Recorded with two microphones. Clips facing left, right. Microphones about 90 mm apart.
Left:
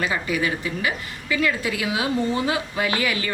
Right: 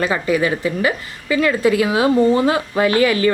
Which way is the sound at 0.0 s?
40° right (ahead or behind).